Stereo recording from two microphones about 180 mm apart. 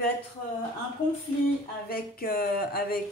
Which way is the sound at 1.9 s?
55° left (ahead or behind).